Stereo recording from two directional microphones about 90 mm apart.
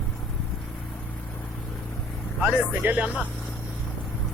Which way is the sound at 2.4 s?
20° right (ahead or behind).